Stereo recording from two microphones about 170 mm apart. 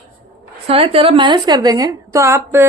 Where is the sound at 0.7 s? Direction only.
35° right (ahead or behind); by 2.7 s 15° right (ahead or behind).